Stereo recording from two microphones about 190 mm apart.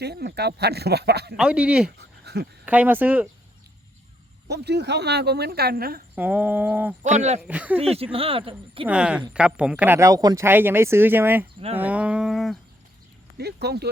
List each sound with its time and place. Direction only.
0.0 s speech: 60° right (ahead or behind)
1.4 s a sound: 5° right (ahead or behind)
2.0 s a sound: 60° right (ahead or behind)
2.6 s speech: 10° right (ahead or behind)
4.4 s speech: 60° right (ahead or behind)
6.1 s speech: 10° right (ahead or behind)
7.0 s speech: 35° right (ahead or behind)
7.4 s speech: 5° right (ahead or behind)
7.8 s speech: 30° right (ahead or behind)
8.9 s a sound: 5° right (ahead or behind)
9.3 s speech: 5° right (ahead or behind)
11.8 s a sound: 5° right (ahead or behind)
13.3 s speech: 60° right (ahead or behind)